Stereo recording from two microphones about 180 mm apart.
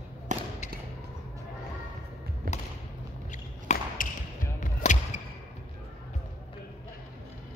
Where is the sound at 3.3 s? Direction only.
45° left (ahead or behind).